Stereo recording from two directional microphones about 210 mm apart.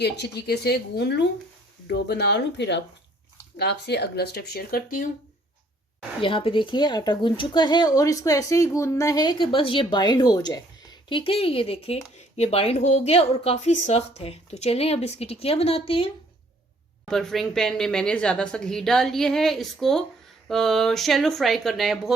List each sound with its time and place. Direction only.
0.0 s speech: 50° left (ahead or behind)
6.2 s speech: 25° left (ahead or behind)
17.1 s a woman's voice: centre (ahead or behind)